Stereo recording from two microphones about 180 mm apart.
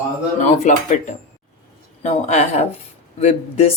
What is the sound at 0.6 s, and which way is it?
Speech, 40° left (ahead or behind).